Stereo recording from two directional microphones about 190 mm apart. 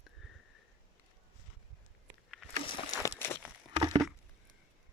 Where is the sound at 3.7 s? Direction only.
25° right (ahead or behind).